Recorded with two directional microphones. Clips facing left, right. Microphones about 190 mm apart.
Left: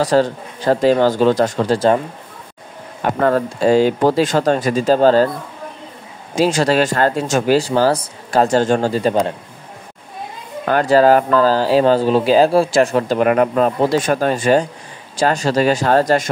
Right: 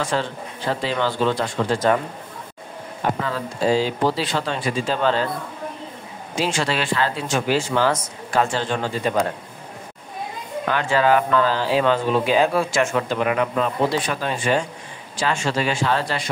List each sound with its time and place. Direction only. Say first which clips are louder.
0.0 s speech: left 9 dB; 40° left (ahead or behind)
3.2 s speech: left 9 dB; 55° left (ahead or behind)
6.3 s speech: left 8 dB; 40° left (ahead or behind)
10.7 s speech: left 7 dB; 40° left (ahead or behind)